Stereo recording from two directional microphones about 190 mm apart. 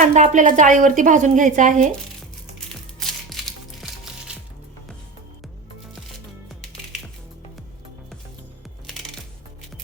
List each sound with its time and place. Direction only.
0.0 s a woman's voice: 40° right (ahead or behind)
3.0 s music: centre (ahead or behind)